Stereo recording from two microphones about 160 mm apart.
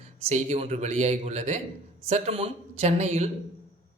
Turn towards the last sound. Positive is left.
turn(degrees=-40)  # may be behind; listen again after turning